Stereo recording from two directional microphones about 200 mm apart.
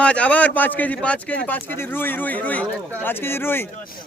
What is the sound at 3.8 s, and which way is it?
Speech, 45° left (ahead or behind).